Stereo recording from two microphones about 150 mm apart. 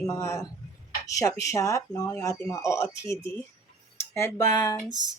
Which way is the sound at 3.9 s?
20° left (ahead or behind).